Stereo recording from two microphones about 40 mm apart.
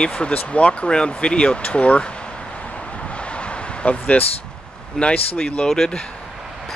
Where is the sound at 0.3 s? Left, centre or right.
Left.